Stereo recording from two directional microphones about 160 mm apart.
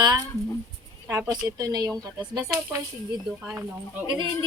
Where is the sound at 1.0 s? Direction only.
15° right (ahead or behind).